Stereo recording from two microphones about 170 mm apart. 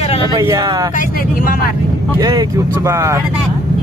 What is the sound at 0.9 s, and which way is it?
Speech, 55° left (ahead or behind).